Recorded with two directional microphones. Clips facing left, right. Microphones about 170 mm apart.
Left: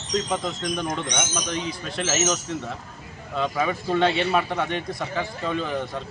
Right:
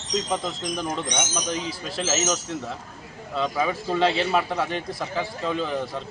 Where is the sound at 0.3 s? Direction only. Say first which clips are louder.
Left 1 dB; centre (ahead or behind).